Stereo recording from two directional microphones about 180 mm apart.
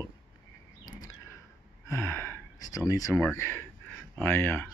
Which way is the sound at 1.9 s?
15° left (ahead or behind).